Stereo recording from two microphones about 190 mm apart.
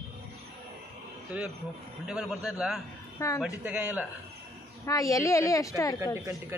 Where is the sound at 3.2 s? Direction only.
15° left (ahead or behind).